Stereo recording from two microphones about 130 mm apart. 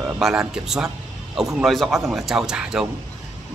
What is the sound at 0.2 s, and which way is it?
Speech, 5° right (ahead or behind).